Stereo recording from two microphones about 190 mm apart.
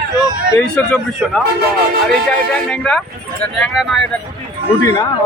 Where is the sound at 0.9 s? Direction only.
Centre (ahead or behind).